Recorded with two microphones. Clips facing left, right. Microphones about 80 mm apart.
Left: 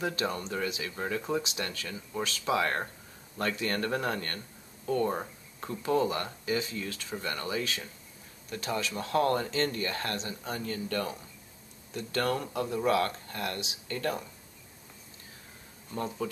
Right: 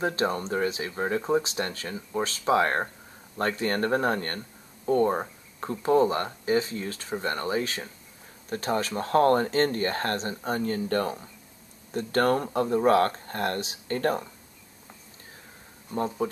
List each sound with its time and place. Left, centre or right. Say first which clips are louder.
0.0 s speech: right 5 dB; right
15.9 s speech: right 6 dB; right